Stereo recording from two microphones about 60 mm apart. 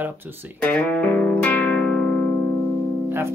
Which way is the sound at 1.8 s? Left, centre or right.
Centre.